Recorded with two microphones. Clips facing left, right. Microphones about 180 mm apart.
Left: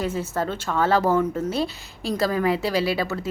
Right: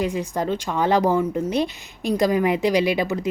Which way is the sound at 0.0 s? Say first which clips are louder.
Right 2 dB; 15° right (ahead or behind).